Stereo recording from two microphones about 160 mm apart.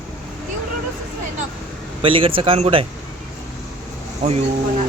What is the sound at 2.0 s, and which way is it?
Speech, 35° right (ahead or behind).